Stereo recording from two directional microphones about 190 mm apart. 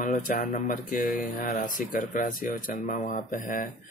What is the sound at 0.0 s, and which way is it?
Speech, 45° left (ahead or behind).